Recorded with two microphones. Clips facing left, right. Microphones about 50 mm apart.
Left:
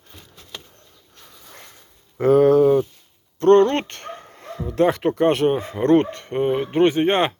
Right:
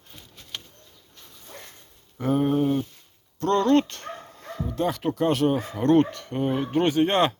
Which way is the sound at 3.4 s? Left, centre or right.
Left.